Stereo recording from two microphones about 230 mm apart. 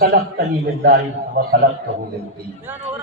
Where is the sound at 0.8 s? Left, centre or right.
Right.